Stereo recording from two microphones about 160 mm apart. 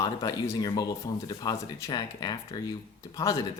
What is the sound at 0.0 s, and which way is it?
Speech, 20° left (ahead or behind).